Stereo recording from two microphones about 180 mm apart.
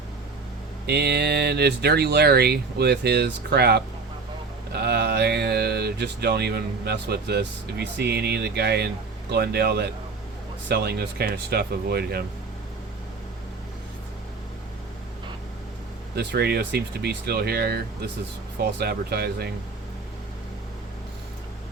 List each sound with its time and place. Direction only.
0.9 s speech: 65° right (ahead or behind)
16.1 s speech: 65° right (ahead or behind)